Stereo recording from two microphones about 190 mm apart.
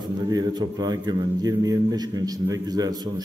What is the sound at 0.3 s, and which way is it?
A man's voice, 20° right (ahead or behind).